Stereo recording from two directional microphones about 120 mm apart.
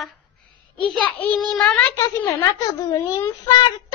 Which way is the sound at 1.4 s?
5° left (ahead or behind).